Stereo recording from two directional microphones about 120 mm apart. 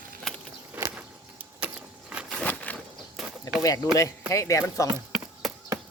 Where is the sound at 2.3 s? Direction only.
10° left (ahead or behind).